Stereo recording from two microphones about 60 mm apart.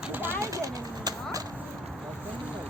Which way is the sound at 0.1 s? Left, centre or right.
Right.